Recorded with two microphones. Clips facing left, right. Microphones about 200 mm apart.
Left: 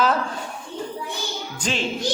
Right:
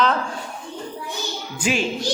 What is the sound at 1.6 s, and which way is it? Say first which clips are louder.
Music: right 5 dB; 10° right (ahead or behind).